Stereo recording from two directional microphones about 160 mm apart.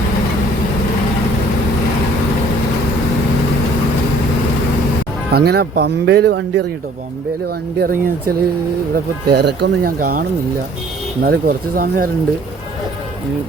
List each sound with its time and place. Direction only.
5.3 s speech: 80° right
7.8 s speech: 65° right (ahead or behind)
9.2 s speech: 90° right; by 12.0 s 65° right (ahead or behind)